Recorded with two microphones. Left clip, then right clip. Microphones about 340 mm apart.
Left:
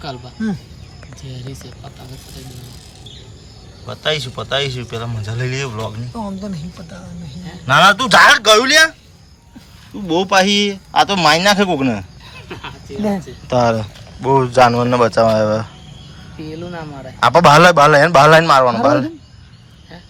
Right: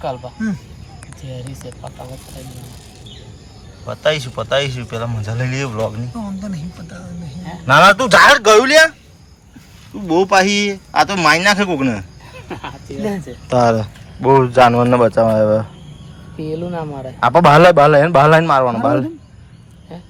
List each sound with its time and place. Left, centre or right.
3.8 s a man's voice: centre
13.5 s a man's voice: centre
16.4 s speech: right
17.2 s a man's voice: centre